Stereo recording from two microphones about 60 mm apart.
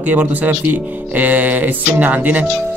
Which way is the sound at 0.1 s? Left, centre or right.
Right.